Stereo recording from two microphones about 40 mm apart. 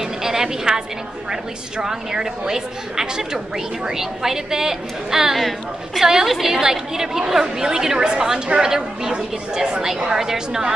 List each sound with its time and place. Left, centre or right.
0.0 s a sound: centre
1.3 s a woman's voice: centre
6.2 s a woman's voice: centre
6.5 s a woman's voice: centre